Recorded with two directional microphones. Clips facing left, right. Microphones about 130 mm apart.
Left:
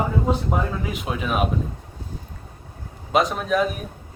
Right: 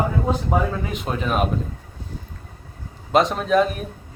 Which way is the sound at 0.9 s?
5° left (ahead or behind).